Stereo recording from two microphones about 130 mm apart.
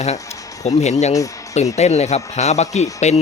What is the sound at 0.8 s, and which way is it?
Speech, 60° left (ahead or behind).